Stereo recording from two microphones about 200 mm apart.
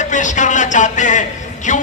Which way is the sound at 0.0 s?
40° left (ahead or behind).